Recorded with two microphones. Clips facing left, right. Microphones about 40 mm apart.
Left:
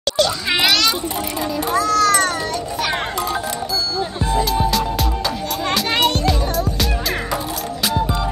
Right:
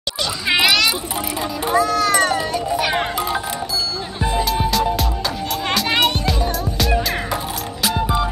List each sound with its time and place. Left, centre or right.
0.2 s children playing: centre
1.6 s music: centre
2.7 s speech: centre
4.2 s music: centre
5.7 s music: centre
7.9 s music: centre